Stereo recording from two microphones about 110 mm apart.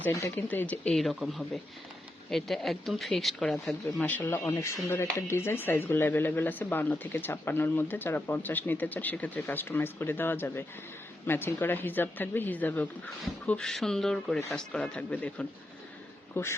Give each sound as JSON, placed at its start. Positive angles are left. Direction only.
{"t": 0.1, "sound": "speech", "side_deg": 25}
{"t": 0.4, "sound": "speech", "side_deg": 15}
{"t": 0.9, "sound": "speech", "side_deg": 0}
{"t": 4.0, "sound": "speech", "side_deg": 15}
{"t": 13.4, "sound": "speech", "side_deg": 5}
{"t": 16.3, "sound": "speech", "side_deg": 25}